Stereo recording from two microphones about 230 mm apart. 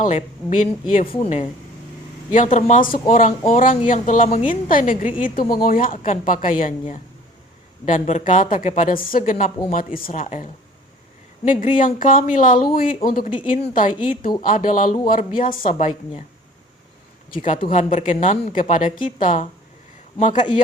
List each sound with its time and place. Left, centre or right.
0.0 s speech: left
17.3 s speech: left